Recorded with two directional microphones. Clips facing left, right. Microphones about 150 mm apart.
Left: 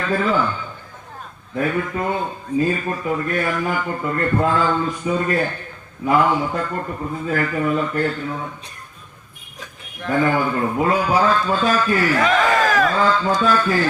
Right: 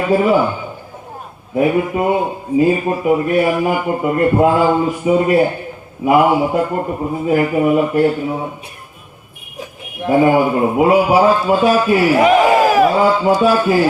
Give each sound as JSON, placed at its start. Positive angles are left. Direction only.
{"t": 0.0, "sound": "speech", "side_deg": -15}
{"t": 9.6, "sound": "a man's voice", "side_deg": -15}